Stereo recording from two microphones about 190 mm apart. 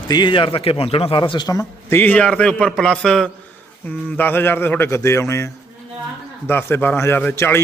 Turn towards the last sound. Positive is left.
turn(degrees=10)  # may be behind; listen again after turning